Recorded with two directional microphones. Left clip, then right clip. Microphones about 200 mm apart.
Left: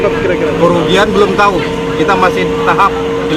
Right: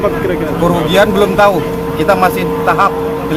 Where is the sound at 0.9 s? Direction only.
30° right (ahead or behind).